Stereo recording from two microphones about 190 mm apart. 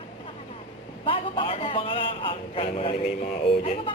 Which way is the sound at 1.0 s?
30° left (ahead or behind).